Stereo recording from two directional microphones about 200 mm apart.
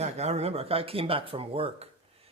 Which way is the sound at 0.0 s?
30° right (ahead or behind).